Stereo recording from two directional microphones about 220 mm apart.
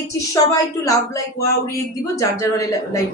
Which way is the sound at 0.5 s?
15° left (ahead or behind).